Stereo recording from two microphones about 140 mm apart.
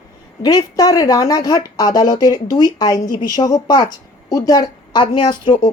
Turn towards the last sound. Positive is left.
turn(degrees=30)  # may be behind; listen again after turning